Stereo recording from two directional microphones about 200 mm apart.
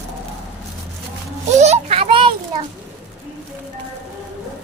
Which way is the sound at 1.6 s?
30° right (ahead or behind).